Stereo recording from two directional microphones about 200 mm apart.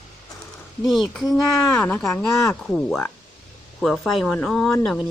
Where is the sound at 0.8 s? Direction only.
Centre (ahead or behind).